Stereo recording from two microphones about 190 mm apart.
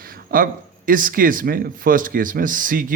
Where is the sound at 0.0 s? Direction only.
50° right (ahead or behind).